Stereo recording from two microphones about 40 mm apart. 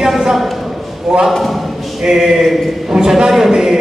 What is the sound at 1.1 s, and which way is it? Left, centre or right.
Speech, right.